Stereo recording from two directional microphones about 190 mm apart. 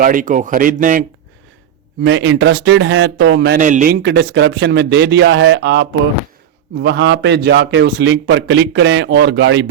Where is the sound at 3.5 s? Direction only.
45° right (ahead or behind).